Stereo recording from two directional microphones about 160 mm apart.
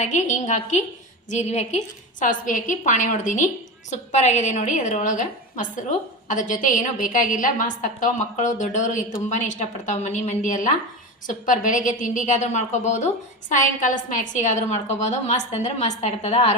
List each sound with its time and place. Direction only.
0.0 s a woman's voice: 50° left (ahead or behind)